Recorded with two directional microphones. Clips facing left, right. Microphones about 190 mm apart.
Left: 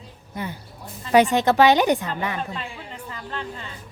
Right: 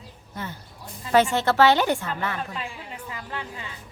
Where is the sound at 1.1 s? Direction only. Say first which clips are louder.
Left 3 dB; 15° left (ahead or behind).